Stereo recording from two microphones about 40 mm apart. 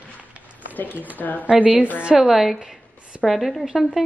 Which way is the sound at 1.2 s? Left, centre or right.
Left.